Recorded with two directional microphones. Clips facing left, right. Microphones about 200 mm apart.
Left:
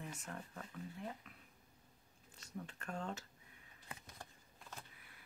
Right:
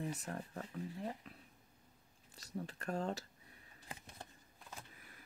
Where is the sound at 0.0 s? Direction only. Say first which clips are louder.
Right 6 dB; 35° right (ahead or behind).